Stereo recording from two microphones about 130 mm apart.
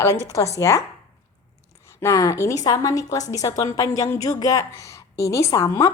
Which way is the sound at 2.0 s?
25° left (ahead or behind).